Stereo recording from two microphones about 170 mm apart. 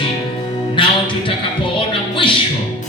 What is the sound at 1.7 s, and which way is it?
Music, 30° left (ahead or behind).